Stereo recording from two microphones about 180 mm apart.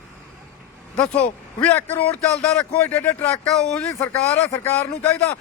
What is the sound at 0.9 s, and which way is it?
A man's voice, 5° left (ahead or behind).